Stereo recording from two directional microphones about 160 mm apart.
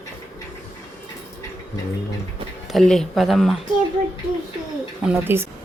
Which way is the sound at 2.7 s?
5° left (ahead or behind).